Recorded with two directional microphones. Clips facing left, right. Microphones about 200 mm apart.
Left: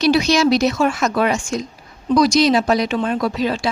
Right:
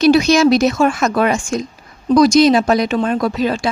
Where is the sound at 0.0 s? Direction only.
50° right (ahead or behind).